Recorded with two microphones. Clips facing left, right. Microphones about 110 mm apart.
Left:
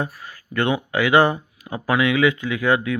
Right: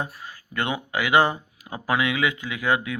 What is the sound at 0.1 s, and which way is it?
Speech, 25° right (ahead or behind).